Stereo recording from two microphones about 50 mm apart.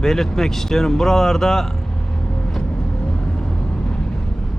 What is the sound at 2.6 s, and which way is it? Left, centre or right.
Vehicle, centre.